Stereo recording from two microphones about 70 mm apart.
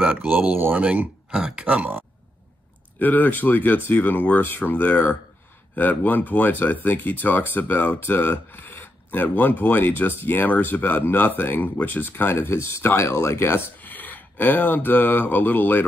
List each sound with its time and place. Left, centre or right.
0.0 s speech: right
3.0 s speech: left
13.7 s speech: left